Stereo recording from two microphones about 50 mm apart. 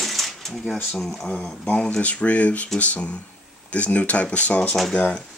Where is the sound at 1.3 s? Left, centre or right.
Left.